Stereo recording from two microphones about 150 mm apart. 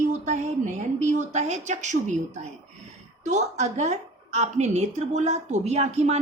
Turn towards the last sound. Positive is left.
turn(degrees=-50)  # may be behind; listen again after turning